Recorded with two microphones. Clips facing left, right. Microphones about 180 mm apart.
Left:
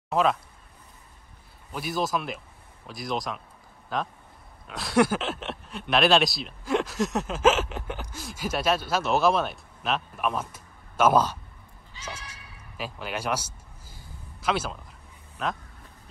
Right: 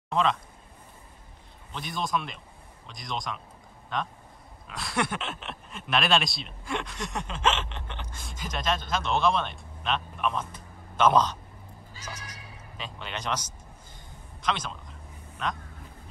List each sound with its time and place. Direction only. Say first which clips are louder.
0.1 s speech: left 2 dB; 5° left (ahead or behind)
1.7 s speech: left 3 dB; 5° left (ahead or behind)
12.0 s neigh: left 3 dB; 25° left (ahead or behind)
12.7 s speech: left 5 dB; 5° left (ahead or behind)
13.9 s a sound: left 1 dB; 5° left (ahead or behind)